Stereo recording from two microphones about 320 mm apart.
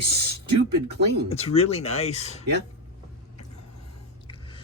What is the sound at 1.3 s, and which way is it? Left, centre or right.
Speech, centre.